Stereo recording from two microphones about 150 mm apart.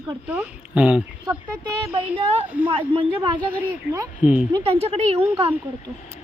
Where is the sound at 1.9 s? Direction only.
40° right (ahead or behind).